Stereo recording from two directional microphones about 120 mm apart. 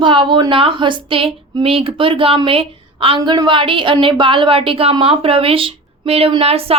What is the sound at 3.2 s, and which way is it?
A woman's voice, 35° right (ahead or behind).